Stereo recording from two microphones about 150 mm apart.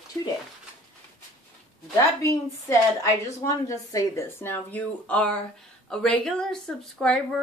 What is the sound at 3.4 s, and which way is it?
Speech, 20° left (ahead or behind).